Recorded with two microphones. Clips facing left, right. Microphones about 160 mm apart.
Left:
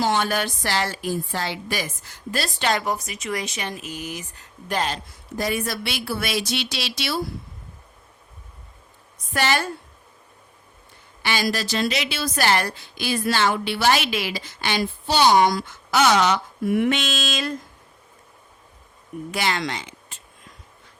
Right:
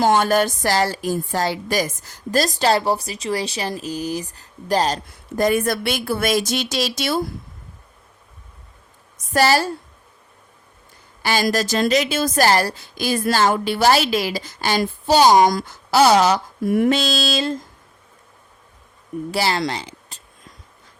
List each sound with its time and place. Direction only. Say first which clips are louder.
0.0 s a woman's voice: right 6 dB; 45° right (ahead or behind)
5.4 s a woman's voice: right 7 dB; 50° right (ahead or behind)
9.3 s a woman's voice: right 6 dB; 35° right (ahead or behind)
11.2 s a woman's voice: right 5 dB; 40° right (ahead or behind)
19.3 s speech: right 4 dB; 35° right (ahead or behind)